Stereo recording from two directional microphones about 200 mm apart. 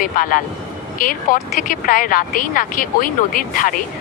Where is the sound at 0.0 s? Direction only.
45° left (ahead or behind).